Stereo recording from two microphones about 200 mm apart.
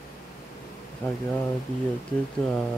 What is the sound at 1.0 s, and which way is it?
Speech, 10° left (ahead or behind).